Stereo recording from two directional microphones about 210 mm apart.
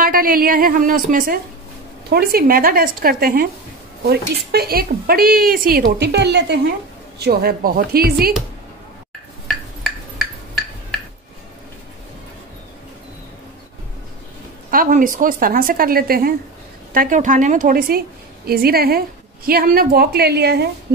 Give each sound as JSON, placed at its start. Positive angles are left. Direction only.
{"t": 0.0, "sound": "a woman's voice", "side_deg": -45}
{"t": 14.7, "sound": "a woman's voice", "side_deg": -40}